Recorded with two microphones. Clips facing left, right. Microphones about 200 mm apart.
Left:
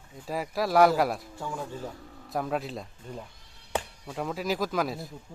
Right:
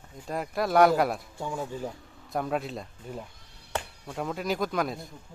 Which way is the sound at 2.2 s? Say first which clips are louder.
Right 1 dB; centre (ahead or behind).